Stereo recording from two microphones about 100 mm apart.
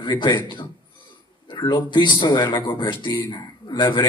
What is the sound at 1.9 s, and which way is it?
Speech, 50° left (ahead or behind).